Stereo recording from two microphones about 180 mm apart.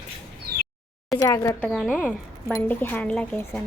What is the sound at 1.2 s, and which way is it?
Speech, 15° left (ahead or behind).